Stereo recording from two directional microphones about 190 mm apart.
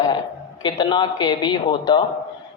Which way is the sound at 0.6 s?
25° left (ahead or behind).